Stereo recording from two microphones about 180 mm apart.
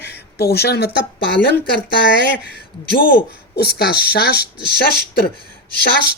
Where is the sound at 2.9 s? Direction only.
55° left (ahead or behind).